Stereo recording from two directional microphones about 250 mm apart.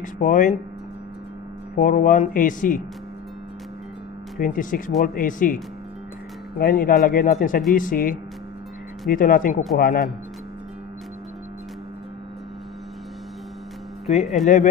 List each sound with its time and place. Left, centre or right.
0.0 s speech: left
1.8 s speech: left
4.4 s speech: left
6.6 s speech: left
14.4 s speech: left